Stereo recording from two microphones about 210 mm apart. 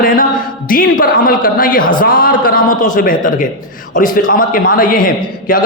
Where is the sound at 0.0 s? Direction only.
40° left (ahead or behind).